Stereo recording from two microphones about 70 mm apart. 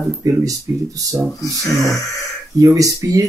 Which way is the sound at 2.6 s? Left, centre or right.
Right.